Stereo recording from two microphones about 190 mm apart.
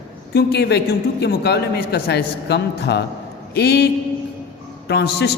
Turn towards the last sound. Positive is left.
turn(degrees=60)  # may be behind; listen again after turning